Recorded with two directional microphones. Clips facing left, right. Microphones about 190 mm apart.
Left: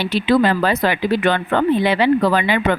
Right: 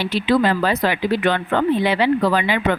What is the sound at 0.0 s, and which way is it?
Speech, 60° left (ahead or behind).